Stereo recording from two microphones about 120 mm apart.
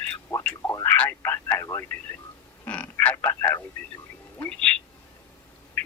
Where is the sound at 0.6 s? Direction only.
25° left (ahead or behind).